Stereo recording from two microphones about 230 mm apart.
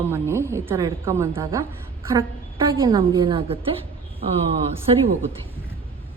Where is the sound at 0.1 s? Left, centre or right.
Centre.